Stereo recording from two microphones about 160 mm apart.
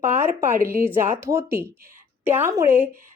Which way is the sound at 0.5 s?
15° right (ahead or behind).